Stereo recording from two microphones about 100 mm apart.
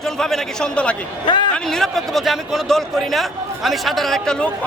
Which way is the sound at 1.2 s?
50° left (ahead or behind).